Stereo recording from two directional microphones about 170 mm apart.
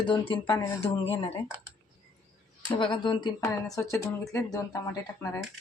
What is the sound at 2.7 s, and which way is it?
Speech, 30° left (ahead or behind).